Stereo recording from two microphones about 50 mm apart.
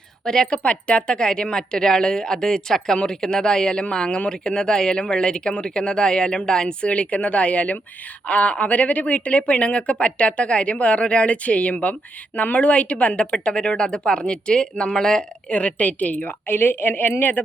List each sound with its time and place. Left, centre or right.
0.3 s speech: centre
0.6 s a woman's voice: left
15.4 s a woman's voice: left
16.5 s a woman's voice: left